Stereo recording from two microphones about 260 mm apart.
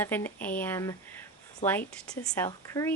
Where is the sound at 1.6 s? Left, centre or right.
Left.